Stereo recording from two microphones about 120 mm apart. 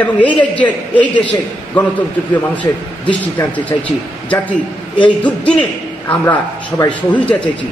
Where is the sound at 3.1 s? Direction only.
10° left (ahead or behind).